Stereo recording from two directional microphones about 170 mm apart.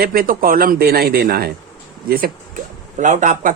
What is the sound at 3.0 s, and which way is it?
Speech, 50° right (ahead or behind).